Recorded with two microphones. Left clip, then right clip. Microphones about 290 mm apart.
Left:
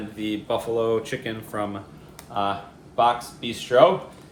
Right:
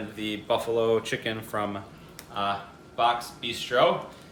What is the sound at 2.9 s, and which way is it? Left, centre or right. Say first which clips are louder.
Speech: left 4 dB; centre.